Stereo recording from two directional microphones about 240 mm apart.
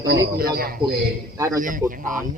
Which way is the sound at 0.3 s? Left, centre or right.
Right.